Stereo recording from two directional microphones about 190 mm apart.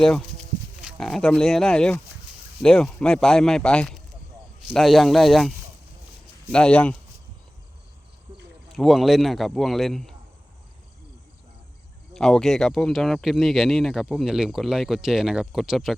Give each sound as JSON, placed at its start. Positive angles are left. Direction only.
{"t": 0.8, "sound": "speech", "side_deg": 0}
{"t": 8.3, "sound": "a sound", "side_deg": -15}
{"t": 8.7, "sound": "speech", "side_deg": 0}
{"t": 12.1, "sound": "speech", "side_deg": 5}